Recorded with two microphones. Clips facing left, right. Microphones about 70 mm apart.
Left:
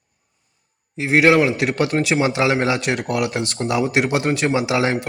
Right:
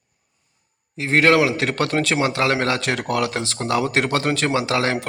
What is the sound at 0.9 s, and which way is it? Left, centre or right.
Speech, centre.